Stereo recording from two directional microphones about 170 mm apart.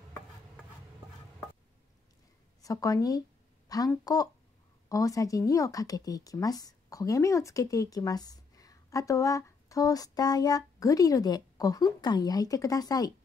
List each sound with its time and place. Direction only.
2.6 s a woman's voice: 20° left (ahead or behind)